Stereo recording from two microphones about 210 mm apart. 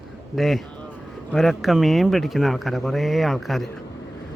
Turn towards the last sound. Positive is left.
turn(degrees=0)  # may be behind; listen again after turning